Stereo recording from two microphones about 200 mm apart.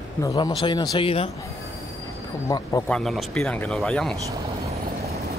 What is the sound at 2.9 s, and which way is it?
Speech, centre (ahead or behind).